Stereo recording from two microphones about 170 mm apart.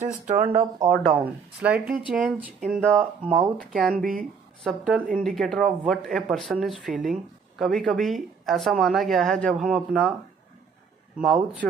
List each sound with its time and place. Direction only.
0.3 s speech: 35° right (ahead or behind)
1.2 s speech: 10° right (ahead or behind)
2.8 s speech: 5° left (ahead or behind)
11.1 s speech: 5° right (ahead or behind)